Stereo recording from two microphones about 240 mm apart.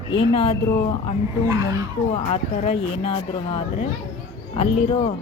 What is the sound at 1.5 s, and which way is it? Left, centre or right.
Speech, centre.